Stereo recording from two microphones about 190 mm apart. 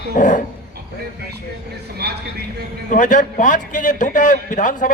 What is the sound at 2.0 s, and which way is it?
Speech, 60° right (ahead or behind).